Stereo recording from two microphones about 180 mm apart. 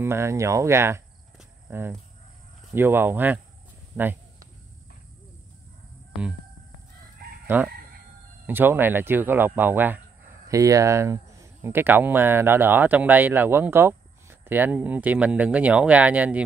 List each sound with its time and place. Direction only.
0.0 s speech: 15° right (ahead or behind)
7.4 s chicken: 10° right (ahead or behind)
8.5 s speech: 10° right (ahead or behind)